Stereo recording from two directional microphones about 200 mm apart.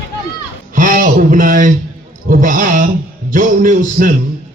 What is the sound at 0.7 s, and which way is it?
A man's voice, 40° right (ahead or behind).